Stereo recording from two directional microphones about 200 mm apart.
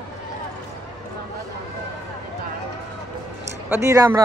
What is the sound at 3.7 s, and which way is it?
Speech, 15° right (ahead or behind).